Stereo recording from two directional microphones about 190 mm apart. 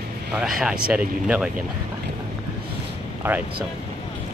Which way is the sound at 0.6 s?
5° right (ahead or behind).